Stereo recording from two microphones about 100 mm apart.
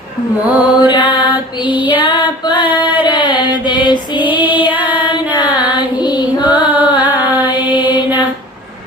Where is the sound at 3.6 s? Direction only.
50° left (ahead or behind).